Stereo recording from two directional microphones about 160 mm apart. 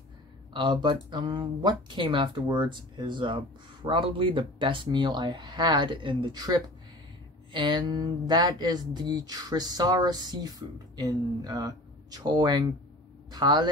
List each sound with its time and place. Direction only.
0.5 s speech: 30° right (ahead or behind)
7.5 s speech: 30° right (ahead or behind)